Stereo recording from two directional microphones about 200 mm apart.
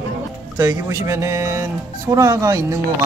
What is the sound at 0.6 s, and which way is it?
Speech, 15° right (ahead or behind).